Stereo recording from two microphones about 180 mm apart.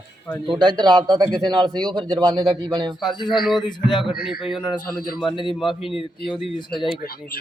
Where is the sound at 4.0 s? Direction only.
Centre (ahead or behind).